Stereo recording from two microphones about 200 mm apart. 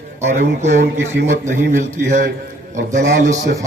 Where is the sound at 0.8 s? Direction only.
60° right (ahead or behind).